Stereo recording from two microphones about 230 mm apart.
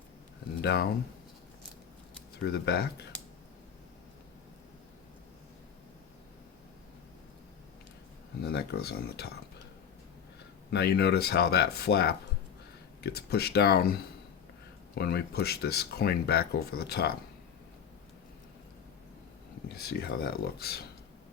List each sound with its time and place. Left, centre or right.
0.6 s speech: left
2.4 s speech: left
8.4 s speech: left
10.7 s speech: left
19.6 s speech: left